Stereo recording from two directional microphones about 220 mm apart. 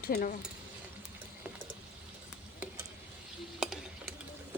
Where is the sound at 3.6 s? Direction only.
Centre (ahead or behind).